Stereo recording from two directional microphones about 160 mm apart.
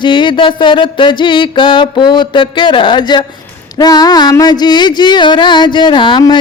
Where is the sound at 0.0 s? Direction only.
30° left (ahead or behind).